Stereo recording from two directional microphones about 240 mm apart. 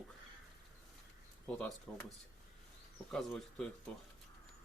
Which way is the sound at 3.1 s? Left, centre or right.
Centre.